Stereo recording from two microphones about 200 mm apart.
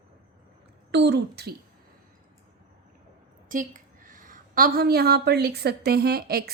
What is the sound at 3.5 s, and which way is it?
A woman's voice, 40° right (ahead or behind).